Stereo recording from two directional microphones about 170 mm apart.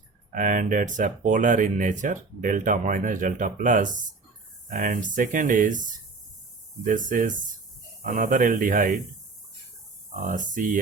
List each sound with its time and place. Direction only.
0.3 s speech: 50° right (ahead or behind)
10.2 s speech: 50° right (ahead or behind)